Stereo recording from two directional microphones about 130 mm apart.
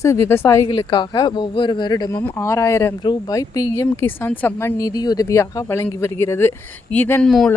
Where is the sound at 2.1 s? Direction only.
15° left (ahead or behind).